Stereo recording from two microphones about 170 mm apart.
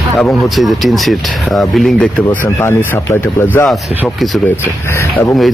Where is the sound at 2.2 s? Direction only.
15° left (ahead or behind).